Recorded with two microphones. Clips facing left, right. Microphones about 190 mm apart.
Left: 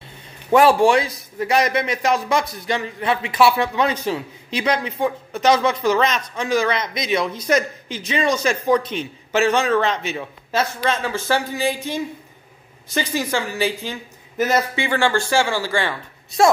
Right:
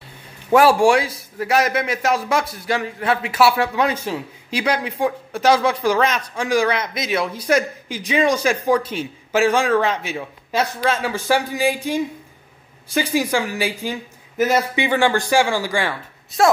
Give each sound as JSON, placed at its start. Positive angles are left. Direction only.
{"t": 0.5, "sound": "a man's voice", "side_deg": -10}
{"t": 16.3, "sound": "speech", "side_deg": 0}